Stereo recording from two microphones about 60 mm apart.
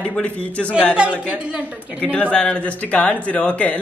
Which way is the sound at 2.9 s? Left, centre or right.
Left.